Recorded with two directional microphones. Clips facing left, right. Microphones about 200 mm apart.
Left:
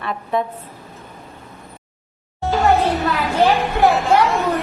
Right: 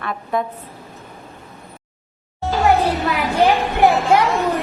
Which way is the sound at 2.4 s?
Centre (ahead or behind).